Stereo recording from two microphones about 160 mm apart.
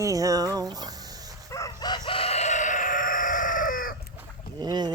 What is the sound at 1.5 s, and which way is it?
Chicken, 20° left (ahead or behind).